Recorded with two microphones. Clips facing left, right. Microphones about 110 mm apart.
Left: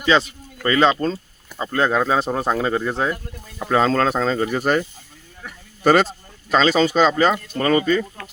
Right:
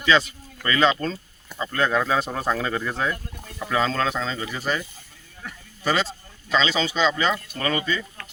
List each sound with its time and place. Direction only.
0.0 s speech: 25° left (ahead or behind)
3.6 s speech: 40° left (ahead or behind)